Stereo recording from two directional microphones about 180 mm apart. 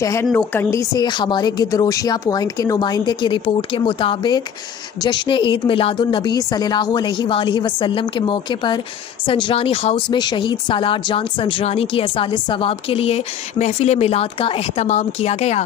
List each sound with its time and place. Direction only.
0.0 s speech: 15° left (ahead or behind)
0.3 s speech: 5° left (ahead or behind)
0.7 s a woman's voice: 20° left (ahead or behind); by 15.6 s 35° left (ahead or behind)